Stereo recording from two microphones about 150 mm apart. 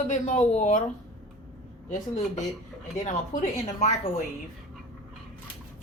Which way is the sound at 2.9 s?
55° left (ahead or behind).